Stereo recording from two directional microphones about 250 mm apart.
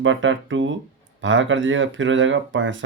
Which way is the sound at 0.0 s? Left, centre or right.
Right.